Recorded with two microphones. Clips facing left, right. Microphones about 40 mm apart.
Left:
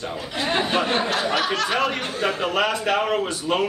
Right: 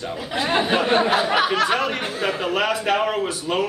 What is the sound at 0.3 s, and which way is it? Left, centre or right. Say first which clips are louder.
A man's voice: right 3 dB; centre.